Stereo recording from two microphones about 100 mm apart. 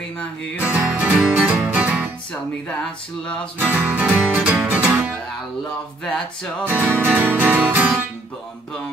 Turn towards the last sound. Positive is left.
turn(degrees=-15)  # may be behind; listen again after turning